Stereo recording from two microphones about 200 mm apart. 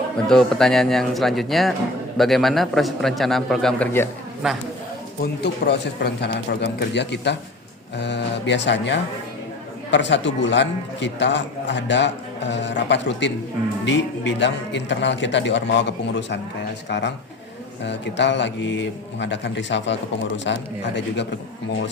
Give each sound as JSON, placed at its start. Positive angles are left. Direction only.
{"t": 0.3, "sound": "a man's voice", "side_deg": 0}
{"t": 4.4, "sound": "a man's voice", "side_deg": -5}
{"t": 5.2, "sound": "a man's voice", "side_deg": 55}